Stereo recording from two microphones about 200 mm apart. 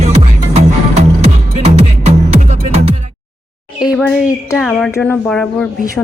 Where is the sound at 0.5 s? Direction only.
30° right (ahead or behind).